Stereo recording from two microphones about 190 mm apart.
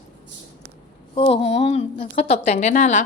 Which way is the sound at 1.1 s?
30° left (ahead or behind).